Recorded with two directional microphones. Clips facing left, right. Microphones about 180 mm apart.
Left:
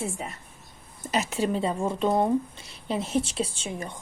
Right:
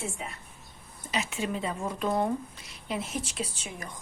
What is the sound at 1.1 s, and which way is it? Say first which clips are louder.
Speech: left 6 dB; 40° left (ahead or behind).